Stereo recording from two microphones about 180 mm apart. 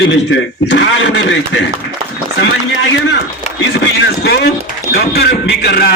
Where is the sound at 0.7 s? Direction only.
80° left.